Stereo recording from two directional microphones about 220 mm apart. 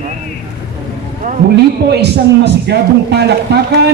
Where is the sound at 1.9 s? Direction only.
50° right (ahead or behind).